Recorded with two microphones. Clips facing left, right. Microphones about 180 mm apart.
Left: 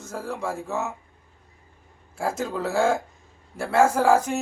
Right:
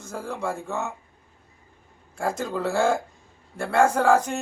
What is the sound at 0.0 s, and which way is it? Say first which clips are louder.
Speech: even; centre (ahead or behind).